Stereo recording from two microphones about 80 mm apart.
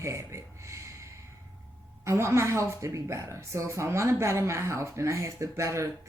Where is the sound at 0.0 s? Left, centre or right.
Right.